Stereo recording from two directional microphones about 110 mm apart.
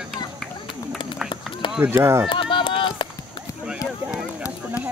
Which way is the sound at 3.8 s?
30° left (ahead or behind).